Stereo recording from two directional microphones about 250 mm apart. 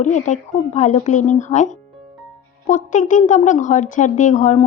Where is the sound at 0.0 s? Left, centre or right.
Left.